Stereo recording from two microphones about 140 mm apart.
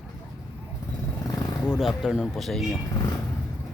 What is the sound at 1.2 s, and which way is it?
Vehicle, 25° left (ahead or behind).